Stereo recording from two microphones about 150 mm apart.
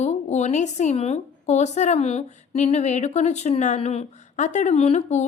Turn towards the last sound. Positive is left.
turn(degrees=50)  # may be behind; listen again after turning